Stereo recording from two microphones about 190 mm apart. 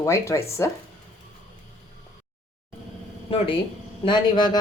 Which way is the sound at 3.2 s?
30° left (ahead or behind).